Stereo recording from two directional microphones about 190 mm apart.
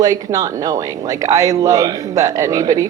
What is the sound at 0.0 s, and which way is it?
A woman's voice, 20° right (ahead or behind).